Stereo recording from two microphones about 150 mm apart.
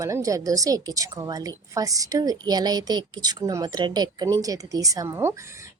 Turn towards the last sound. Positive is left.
turn(degrees=-20)  # may be behind; listen again after turning